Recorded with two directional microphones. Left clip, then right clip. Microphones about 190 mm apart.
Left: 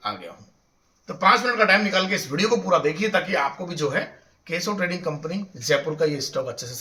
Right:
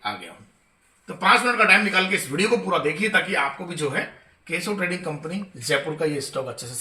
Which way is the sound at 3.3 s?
15° left (ahead or behind).